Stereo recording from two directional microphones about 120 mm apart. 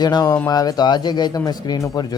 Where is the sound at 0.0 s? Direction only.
35° left (ahead or behind).